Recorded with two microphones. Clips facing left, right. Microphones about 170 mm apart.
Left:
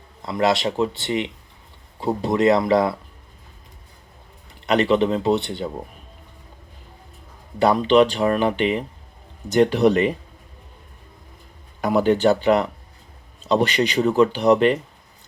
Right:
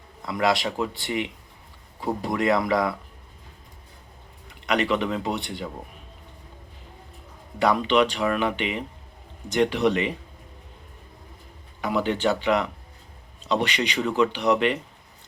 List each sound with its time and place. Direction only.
0.2 s speech: 25° left (ahead or behind)
4.6 s speech: 30° left (ahead or behind)
7.6 s speech: 30° left (ahead or behind)
11.8 s speech: 40° left (ahead or behind)